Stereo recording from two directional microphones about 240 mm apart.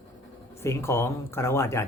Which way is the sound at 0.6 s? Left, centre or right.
Centre.